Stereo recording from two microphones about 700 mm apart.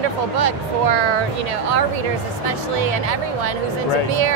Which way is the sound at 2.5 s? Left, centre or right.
Right.